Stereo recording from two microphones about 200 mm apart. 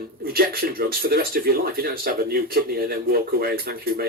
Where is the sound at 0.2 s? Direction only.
50° right (ahead or behind).